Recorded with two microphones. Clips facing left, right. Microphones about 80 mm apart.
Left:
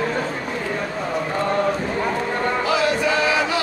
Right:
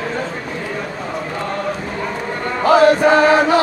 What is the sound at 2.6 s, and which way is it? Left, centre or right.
Chant, right.